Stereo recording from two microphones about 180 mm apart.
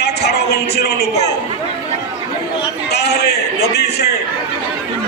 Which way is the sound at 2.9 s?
65° left (ahead or behind).